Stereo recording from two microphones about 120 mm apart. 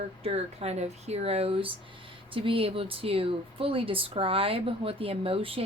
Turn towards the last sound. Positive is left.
turn(degrees=-50)  # may be behind; listen again after turning